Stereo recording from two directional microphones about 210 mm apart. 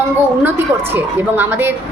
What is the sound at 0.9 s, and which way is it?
Speech, 10° right (ahead or behind).